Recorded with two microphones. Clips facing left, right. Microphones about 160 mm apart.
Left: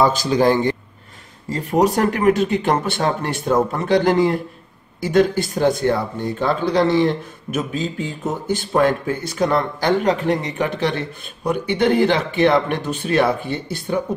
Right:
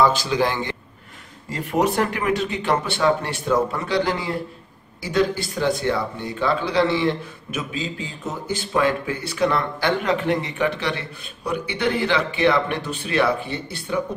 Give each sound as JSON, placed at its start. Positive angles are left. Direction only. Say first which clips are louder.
{"t": 0.0, "sound": "speech", "louder": "left 3 dB", "side_deg": 45}